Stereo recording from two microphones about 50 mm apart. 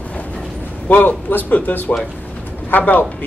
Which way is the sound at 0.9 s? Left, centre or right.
Left.